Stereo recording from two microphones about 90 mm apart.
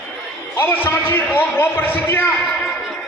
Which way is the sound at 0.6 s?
25° left (ahead or behind).